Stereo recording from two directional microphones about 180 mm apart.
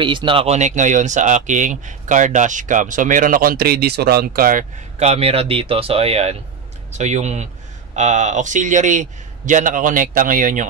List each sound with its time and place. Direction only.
0.0 s speech: 25° right (ahead or behind); by 4.6 s 50° right (ahead or behind)
4.9 s speech: 35° right (ahead or behind)